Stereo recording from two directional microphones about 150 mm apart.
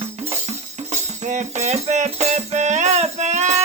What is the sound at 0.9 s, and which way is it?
Music, 50° right (ahead or behind).